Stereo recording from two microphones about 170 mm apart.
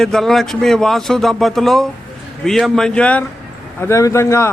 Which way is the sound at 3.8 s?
15° left (ahead or behind).